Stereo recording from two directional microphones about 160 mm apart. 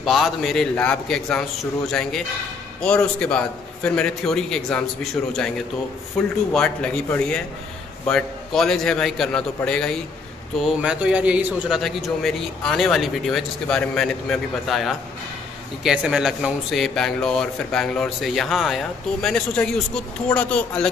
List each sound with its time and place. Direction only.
0.0 s a man's voice: centre (ahead or behind)
6.2 s a man's voice: 5° left (ahead or behind)
10.6 s a man's voice: 5° right (ahead or behind)